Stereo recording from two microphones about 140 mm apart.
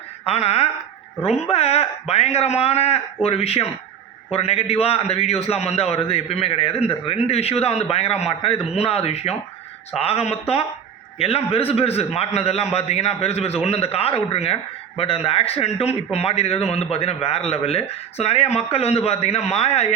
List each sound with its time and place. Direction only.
0.3 s a man's voice: 45° left (ahead or behind)